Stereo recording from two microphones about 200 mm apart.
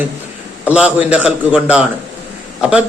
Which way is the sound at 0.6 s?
5° right (ahead or behind).